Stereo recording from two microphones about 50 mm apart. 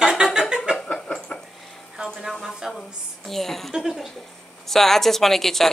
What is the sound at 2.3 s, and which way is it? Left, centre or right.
Speech, centre.